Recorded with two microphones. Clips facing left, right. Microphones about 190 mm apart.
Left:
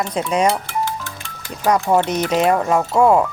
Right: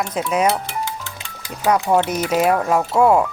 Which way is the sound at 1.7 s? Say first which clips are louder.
Left 1 dB; 10° right (ahead or behind).